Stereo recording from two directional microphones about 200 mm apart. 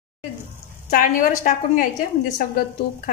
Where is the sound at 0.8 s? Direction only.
40° left (ahead or behind).